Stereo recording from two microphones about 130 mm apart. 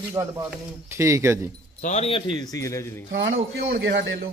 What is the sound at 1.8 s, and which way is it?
A man's voice, 60° left (ahead or behind).